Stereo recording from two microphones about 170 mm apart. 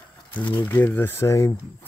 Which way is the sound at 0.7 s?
15° left (ahead or behind).